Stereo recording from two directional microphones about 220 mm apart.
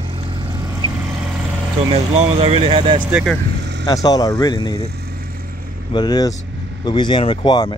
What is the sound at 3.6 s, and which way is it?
Vehicle, 50° right (ahead or behind).